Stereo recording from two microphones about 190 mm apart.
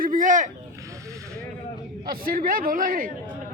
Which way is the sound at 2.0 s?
50° right (ahead or behind).